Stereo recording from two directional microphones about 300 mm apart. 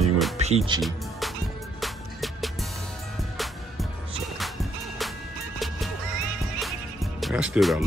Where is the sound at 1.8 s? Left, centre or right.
Centre.